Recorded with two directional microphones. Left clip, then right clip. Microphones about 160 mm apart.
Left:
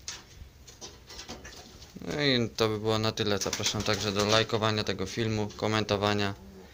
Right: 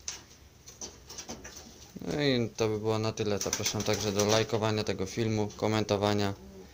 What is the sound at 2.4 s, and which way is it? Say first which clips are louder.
Speech: left 2 dB; centre (ahead or behind).